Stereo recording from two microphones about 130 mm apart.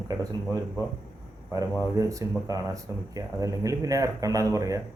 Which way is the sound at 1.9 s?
25° right (ahead or behind).